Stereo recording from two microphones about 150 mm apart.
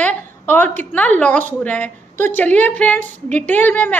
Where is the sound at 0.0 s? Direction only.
10° left (ahead or behind).